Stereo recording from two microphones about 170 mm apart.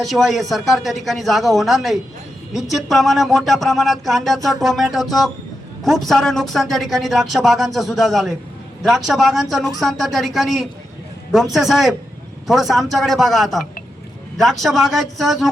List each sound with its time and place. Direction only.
0.0 s speech: centre (ahead or behind)